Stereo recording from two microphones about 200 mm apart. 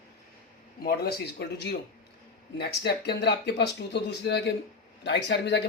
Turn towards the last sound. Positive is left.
turn(degrees=60)  # may be behind; listen again after turning